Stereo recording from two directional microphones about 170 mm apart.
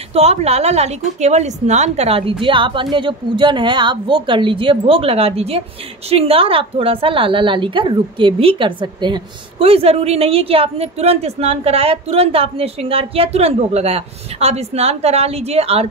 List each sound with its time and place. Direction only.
0.1 s a woman's voice: 35° right (ahead or behind)